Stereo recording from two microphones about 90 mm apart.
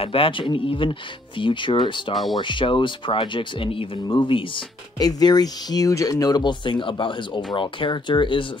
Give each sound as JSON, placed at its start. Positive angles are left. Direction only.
{"t": 0.0, "sound": "speech", "side_deg": 90}
{"t": 4.9, "sound": "speech", "side_deg": 45}